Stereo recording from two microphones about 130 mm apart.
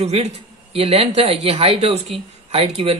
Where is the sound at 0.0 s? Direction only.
55° right (ahead or behind).